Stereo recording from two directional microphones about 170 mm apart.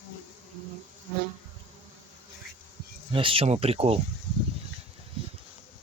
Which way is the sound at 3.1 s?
30° right (ahead or behind).